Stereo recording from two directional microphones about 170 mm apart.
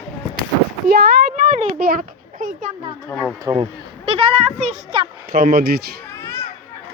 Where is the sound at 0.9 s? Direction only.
65° right (ahead or behind).